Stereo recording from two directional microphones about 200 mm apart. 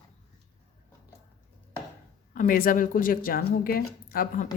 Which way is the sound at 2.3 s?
45° left (ahead or behind).